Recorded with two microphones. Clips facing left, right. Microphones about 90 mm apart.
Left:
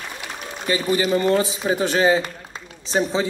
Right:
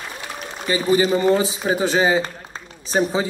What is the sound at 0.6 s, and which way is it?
A man's voice, 20° right (ahead or behind).